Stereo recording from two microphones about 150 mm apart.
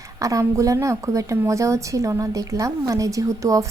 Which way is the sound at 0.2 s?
20° right (ahead or behind).